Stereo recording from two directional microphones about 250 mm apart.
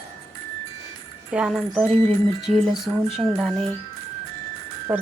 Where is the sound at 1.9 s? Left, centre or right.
Right.